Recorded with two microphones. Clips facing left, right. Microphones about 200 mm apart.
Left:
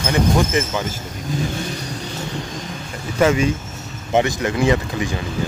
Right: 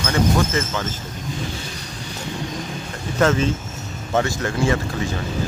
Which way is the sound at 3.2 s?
10° left (ahead or behind).